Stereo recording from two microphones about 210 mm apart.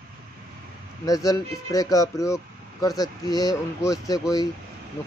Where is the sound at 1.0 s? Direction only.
15° left (ahead or behind).